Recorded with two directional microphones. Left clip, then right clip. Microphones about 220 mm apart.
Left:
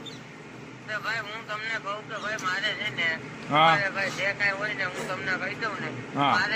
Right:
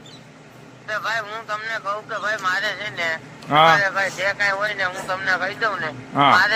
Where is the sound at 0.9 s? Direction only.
40° right (ahead or behind).